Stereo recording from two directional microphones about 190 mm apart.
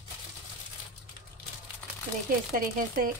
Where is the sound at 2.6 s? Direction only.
45° right (ahead or behind).